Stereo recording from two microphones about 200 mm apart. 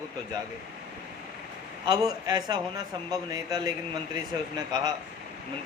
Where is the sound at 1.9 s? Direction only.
20° right (ahead or behind).